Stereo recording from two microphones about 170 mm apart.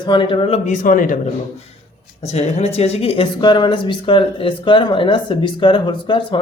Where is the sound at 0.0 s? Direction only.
25° left (ahead or behind); by 1.2 s 50° left (ahead or behind).